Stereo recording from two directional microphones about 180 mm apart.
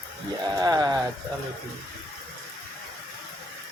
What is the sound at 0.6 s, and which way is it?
Speech, 20° right (ahead or behind).